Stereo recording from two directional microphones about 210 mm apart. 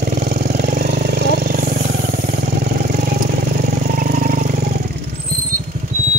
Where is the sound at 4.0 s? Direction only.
40° right (ahead or behind).